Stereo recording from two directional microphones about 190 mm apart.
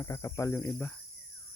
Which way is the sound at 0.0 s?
15° left (ahead or behind).